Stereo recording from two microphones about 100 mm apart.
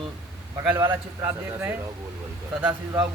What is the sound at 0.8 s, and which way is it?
A man's voice, 25° right (ahead or behind).